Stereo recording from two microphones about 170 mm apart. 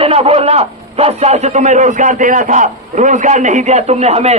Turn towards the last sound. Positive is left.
turn(degrees=-40)  # may be behind; listen again after turning